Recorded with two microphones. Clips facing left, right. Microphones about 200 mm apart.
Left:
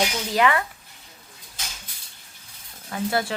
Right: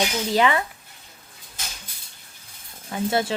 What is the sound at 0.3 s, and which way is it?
Speech, 25° right (ahead or behind).